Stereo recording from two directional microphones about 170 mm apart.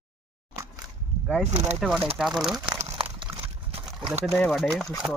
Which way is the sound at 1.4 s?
40° right (ahead or behind).